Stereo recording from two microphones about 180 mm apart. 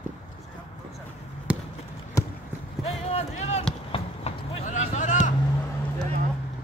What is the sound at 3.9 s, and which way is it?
Vehicle, 35° left (ahead or behind).